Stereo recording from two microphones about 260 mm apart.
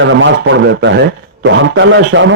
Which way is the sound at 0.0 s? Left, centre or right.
Right.